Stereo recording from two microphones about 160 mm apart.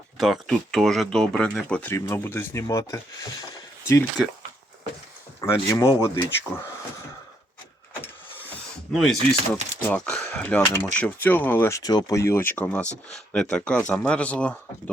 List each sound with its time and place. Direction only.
0.2 s speech: centre (ahead or behind); by 3.0 s 20° left (ahead or behind)
5.4 s speech: 20° left (ahead or behind)
8.9 s speech: centre (ahead or behind)
9.1 s speech: 40° right (ahead or behind)
9.8 s speech: 5° left (ahead or behind)